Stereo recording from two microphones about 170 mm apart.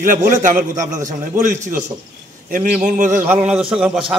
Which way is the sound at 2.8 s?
50° right (ahead or behind).